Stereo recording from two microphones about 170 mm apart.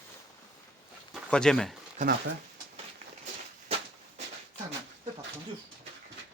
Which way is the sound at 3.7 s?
35° right (ahead or behind).